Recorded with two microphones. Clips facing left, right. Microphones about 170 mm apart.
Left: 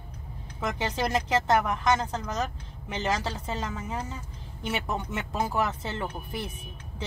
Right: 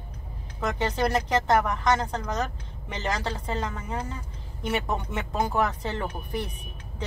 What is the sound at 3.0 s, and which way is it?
Speech, 5° left (ahead or behind).